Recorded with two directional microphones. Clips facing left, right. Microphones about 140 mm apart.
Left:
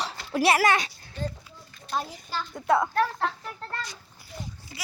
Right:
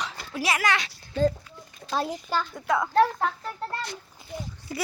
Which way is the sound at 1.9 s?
90° right.